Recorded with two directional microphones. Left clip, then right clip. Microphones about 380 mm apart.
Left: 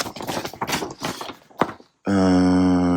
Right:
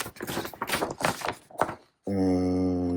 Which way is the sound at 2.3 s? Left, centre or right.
Centre.